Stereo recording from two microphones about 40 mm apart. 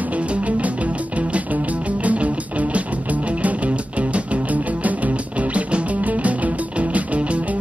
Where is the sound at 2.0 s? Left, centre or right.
Right.